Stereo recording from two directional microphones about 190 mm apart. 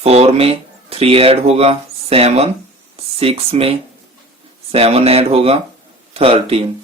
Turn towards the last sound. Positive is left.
turn(degrees=-30)  # may be behind; listen again after turning